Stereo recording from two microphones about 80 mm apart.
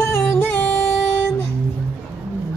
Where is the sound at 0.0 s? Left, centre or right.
Left.